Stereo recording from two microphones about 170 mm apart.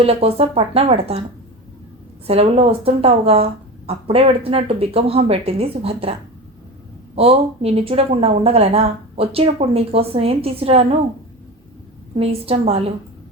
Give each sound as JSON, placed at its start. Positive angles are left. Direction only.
{"t": 0.0, "sound": "speech", "side_deg": -35}
{"t": 2.2, "sound": "speech", "side_deg": -35}
{"t": 7.2, "sound": "speech", "side_deg": -35}
{"t": 12.1, "sound": "speech", "side_deg": -35}